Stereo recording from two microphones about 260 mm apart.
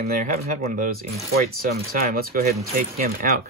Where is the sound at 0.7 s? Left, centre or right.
Right.